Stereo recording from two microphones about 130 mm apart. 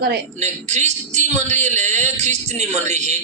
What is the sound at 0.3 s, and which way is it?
A man's voice, 60° right (ahead or behind).